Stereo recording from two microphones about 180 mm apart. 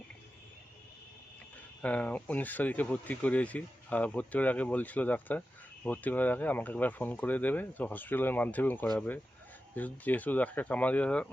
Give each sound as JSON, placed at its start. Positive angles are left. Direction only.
{"t": 1.8, "sound": "speech", "side_deg": 10}